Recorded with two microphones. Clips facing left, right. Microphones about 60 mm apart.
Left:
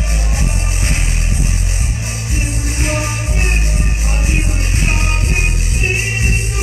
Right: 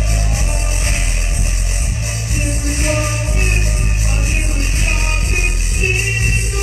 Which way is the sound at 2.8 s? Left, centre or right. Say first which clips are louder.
Right 1 dB; left.